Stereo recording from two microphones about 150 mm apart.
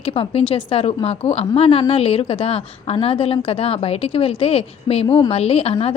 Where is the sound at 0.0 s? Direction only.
40° left (ahead or behind).